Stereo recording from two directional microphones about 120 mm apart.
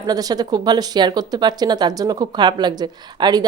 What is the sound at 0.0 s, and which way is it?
Speech, 30° right (ahead or behind).